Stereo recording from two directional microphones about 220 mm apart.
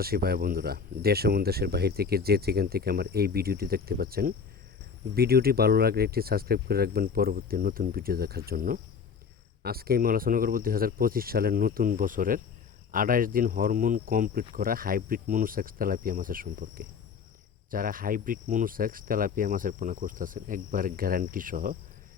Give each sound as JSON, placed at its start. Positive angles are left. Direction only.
{"t": 0.0, "sound": "speech", "side_deg": -45}
{"t": 9.6, "sound": "cricket", "side_deg": -45}